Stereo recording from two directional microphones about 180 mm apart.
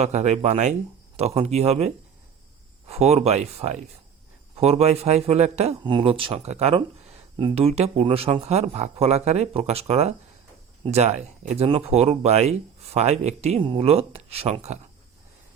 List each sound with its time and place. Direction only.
0.0 s speech: 40° right (ahead or behind)